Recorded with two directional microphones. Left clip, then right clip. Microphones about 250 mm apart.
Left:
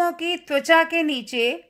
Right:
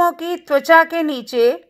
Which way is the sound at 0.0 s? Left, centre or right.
Centre.